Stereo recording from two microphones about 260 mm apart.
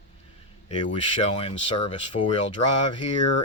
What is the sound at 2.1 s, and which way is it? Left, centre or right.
Speech, left.